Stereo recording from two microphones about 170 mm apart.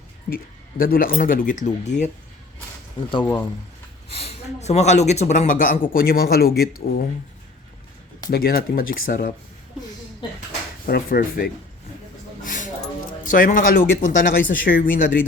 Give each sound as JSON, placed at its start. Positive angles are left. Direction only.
{"t": 0.3, "sound": "speech", "side_deg": 50}
{"t": 4.1, "sound": "speech", "side_deg": 35}
{"t": 8.3, "sound": "speech", "side_deg": 60}
{"t": 10.8, "sound": "speech", "side_deg": 60}
{"t": 12.4, "sound": "a sound", "side_deg": 50}
{"t": 13.2, "sound": "speech", "side_deg": 50}